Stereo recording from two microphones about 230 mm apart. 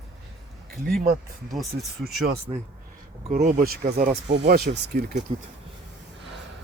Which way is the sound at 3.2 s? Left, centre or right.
Right.